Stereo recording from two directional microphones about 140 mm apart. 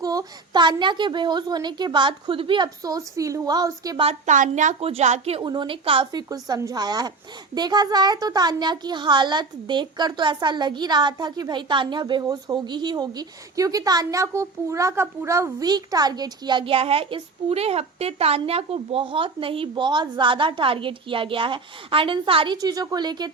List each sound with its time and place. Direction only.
0.0 s a child's voice: 25° right (ahead or behind)
4.0 s a woman's voice: 55° right (ahead or behind)
4.8 s a woman's voice: 45° right (ahead or behind)
5.4 s a child's voice: 35° right (ahead or behind)
22.6 s speech: 25° right (ahead or behind)